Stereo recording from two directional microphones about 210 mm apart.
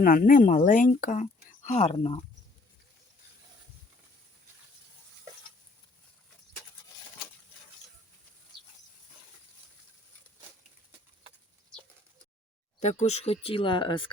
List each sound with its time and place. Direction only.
0.0 s speech: 40° left (ahead or behind)
12.8 s speech: 35° left (ahead or behind)